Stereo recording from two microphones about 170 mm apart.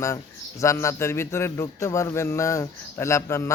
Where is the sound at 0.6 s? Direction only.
15° left (ahead or behind).